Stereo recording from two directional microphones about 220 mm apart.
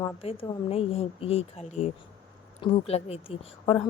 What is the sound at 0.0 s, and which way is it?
Speech, 25° left (ahead or behind).